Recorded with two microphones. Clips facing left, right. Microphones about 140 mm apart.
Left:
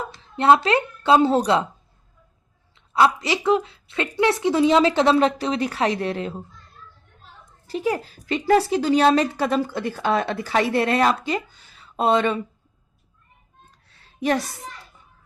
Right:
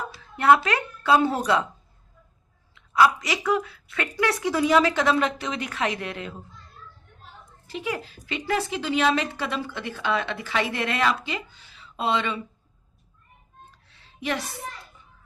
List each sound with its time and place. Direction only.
0.2 s a woman's voice: 25° left (ahead or behind)
2.7 s a woman's voice: 30° left (ahead or behind)
7.7 s a woman's voice: 40° left (ahead or behind)
14.0 s music: 40° left (ahead or behind)